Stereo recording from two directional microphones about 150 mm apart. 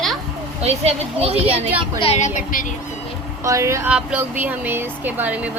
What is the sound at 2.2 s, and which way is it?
Speech, 65° left (ahead or behind).